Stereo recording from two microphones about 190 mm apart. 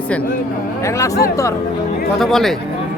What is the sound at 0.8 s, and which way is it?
Speech, 15° left (ahead or behind).